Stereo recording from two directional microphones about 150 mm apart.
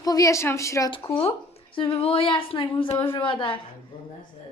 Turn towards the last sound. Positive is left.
turn(degrees=35)  # may be behind; listen again after turning